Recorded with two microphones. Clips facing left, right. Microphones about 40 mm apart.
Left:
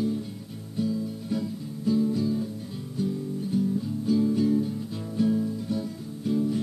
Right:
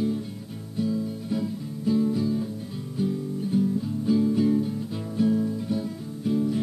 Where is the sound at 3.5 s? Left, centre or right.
Centre.